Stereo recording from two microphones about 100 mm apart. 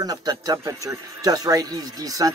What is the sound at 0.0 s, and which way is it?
Speech, 40° right (ahead or behind).